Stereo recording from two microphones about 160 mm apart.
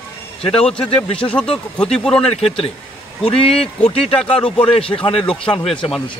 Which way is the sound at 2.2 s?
40° left (ahead or behind).